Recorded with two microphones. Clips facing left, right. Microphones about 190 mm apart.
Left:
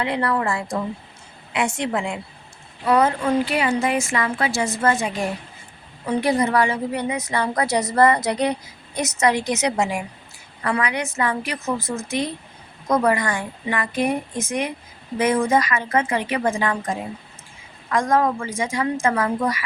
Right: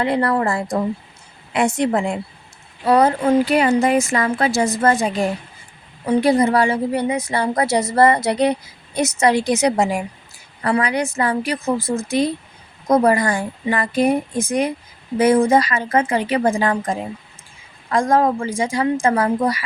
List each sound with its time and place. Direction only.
0.0 s a woman's voice: 40° right (ahead or behind)